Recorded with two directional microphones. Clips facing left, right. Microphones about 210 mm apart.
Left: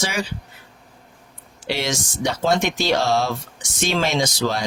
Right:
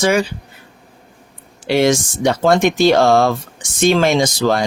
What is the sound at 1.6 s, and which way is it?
Speech, 50° right (ahead or behind).